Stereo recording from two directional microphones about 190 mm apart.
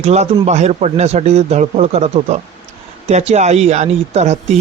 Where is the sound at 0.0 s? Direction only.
35° right (ahead or behind).